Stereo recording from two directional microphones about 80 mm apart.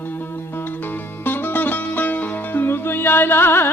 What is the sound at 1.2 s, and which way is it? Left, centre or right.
Music, left.